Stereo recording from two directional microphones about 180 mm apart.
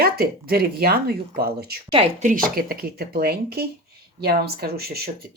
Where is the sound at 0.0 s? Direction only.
55° right (ahead or behind).